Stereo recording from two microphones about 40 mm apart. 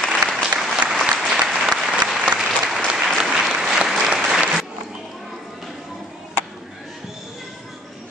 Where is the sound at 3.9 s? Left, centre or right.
Centre.